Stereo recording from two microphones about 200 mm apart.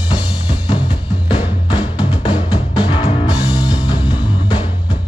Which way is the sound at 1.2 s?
25° left (ahead or behind).